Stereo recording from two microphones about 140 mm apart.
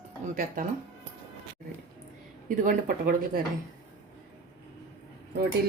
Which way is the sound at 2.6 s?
90° right.